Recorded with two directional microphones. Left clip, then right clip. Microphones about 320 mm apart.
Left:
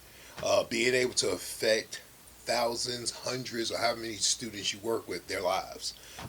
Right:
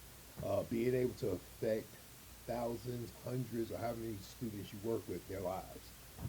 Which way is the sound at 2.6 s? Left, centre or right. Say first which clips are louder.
Left 11 dB; centre.